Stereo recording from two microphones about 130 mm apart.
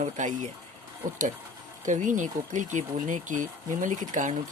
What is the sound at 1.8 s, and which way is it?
Speech, 75° right (ahead or behind).